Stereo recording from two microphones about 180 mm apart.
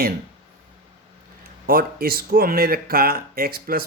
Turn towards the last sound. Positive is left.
turn(degrees=-55)  # may be behind; listen again after turning